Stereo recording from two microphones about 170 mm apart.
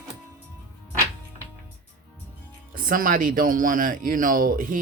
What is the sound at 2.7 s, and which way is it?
Speech, 55° right (ahead or behind).